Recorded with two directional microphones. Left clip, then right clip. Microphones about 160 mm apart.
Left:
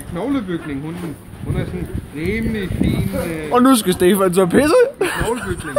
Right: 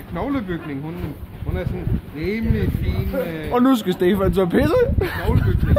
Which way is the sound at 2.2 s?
15° right (ahead or behind).